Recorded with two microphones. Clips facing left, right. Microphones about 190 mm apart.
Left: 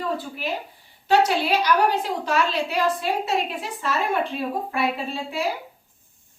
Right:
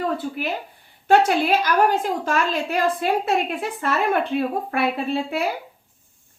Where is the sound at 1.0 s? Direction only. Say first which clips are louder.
Right 3 dB; 50° right (ahead or behind).